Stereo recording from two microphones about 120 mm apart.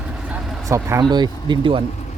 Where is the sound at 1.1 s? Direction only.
40° right (ahead or behind).